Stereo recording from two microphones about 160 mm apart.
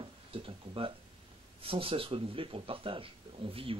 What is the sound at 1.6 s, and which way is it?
Speech, 35° right (ahead or behind).